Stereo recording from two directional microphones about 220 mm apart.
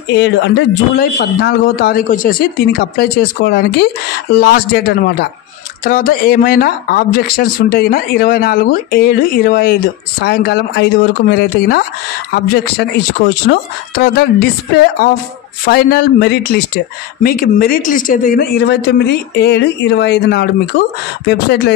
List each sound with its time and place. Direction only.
0.1 s speech: 55° left (ahead or behind)